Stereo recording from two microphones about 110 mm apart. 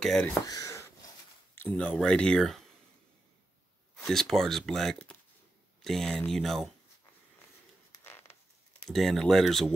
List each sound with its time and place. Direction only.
0.0 s speech: 5° left (ahead or behind)
0.3 s a sound: 30° left (ahead or behind)
1.5 s speech: 15° left (ahead or behind)
3.9 s speech: 5° left (ahead or behind)
8.0 s zipper: 20° left (ahead or behind)
8.8 s speech: centre (ahead or behind)